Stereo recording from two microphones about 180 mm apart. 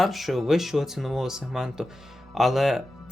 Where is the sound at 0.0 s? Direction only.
Centre (ahead or behind).